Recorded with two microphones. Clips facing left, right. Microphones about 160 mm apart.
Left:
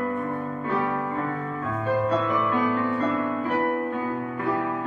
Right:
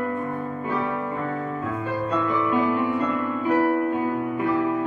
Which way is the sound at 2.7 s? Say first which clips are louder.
Right 2 dB; 15° right (ahead or behind).